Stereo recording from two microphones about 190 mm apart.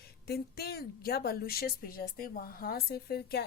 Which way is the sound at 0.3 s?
55° left (ahead or behind).